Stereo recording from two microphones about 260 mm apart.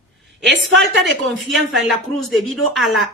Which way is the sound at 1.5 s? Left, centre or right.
Centre.